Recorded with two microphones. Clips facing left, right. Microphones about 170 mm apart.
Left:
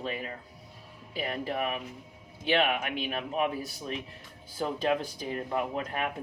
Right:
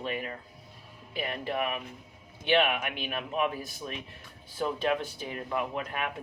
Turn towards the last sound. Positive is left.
turn(degrees=35)  # may be behind; listen again after turning